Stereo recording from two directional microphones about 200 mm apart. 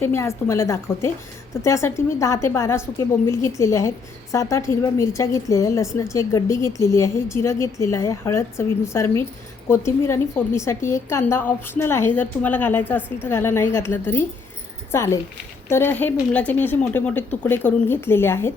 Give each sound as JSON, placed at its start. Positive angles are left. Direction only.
{"t": 0.0, "sound": "a woman's voice", "side_deg": 10}